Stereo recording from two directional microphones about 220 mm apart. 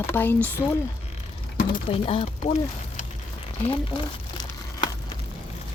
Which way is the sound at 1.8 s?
25° left (ahead or behind).